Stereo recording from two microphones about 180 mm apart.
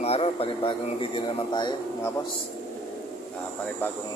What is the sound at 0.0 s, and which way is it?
A man's voice, 35° left (ahead or behind).